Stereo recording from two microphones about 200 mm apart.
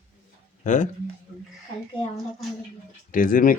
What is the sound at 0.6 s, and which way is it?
Speech, 40° left (ahead or behind).